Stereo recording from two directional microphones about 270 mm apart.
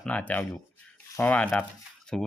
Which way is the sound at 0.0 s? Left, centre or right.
Centre.